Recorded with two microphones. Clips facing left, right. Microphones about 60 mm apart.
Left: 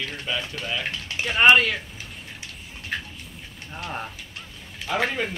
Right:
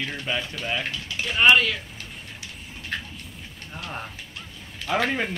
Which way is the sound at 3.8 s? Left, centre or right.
Centre.